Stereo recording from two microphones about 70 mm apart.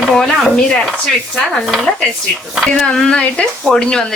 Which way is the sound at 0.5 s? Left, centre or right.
Centre.